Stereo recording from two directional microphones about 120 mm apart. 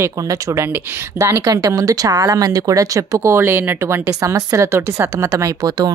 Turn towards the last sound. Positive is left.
turn(degrees=-35)  # may be behind; listen again after turning